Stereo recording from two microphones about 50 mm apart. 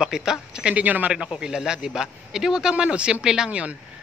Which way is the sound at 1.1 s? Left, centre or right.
Centre.